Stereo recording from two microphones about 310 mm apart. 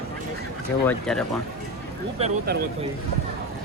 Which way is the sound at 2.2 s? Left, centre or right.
Right.